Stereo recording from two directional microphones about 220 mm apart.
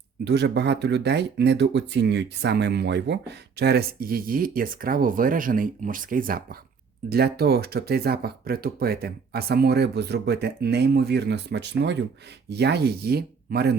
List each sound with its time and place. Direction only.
0.3 s speech: 50° right (ahead or behind)